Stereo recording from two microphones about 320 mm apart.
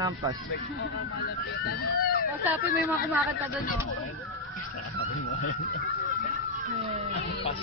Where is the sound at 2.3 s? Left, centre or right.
Centre.